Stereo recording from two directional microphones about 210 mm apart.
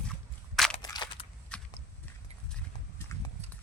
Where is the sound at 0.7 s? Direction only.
20° left (ahead or behind).